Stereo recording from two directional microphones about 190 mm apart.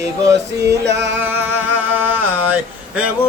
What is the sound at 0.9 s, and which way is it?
Speech, 65° right (ahead or behind).